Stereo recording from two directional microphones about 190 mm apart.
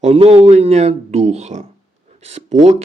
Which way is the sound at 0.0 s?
30° right (ahead or behind).